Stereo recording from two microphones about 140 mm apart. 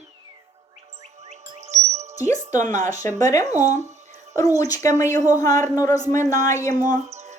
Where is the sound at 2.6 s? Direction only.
60° right (ahead or behind).